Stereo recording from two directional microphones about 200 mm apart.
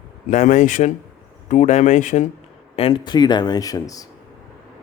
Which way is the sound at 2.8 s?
25° left (ahead or behind).